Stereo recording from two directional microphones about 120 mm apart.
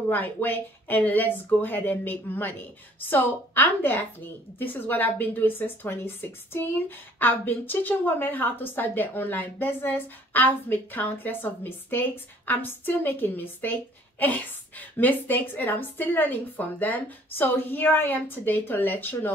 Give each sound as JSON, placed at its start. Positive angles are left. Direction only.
{"t": 0.1, "sound": "a woman's voice", "side_deg": 15}